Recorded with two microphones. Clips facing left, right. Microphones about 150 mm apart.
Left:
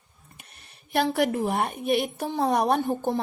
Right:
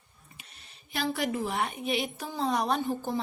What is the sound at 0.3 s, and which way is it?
Speech, 55° left (ahead or behind).